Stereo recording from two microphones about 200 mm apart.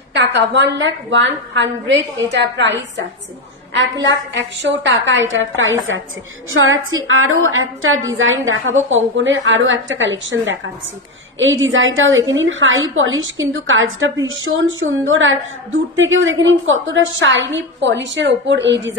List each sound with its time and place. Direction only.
0.1 s a woman's voice: 60° right (ahead or behind)
4.0 s a woman's voice: 65° right (ahead or behind)
11.3 s a woman's voice: 75° right (ahead or behind)